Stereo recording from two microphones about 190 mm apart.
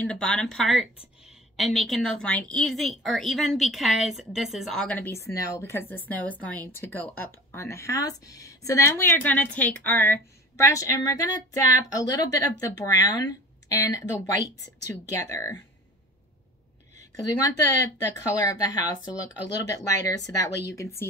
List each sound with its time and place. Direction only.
0.0 s a woman's voice: 5° left (ahead or behind)
15.0 s speech: 15° left (ahead or behind)
17.2 s speech: 20° left (ahead or behind)